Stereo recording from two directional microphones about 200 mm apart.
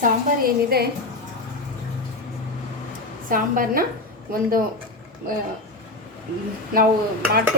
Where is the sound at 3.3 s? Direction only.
45° right (ahead or behind).